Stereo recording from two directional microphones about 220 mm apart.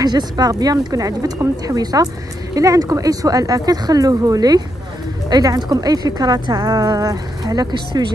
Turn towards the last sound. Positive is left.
turn(degrees=-20)  # may be behind; listen again after turning